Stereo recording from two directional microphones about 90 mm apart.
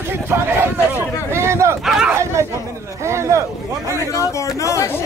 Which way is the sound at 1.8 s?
5° right (ahead or behind).